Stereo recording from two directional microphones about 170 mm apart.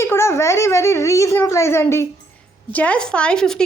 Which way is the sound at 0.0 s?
15° left (ahead or behind).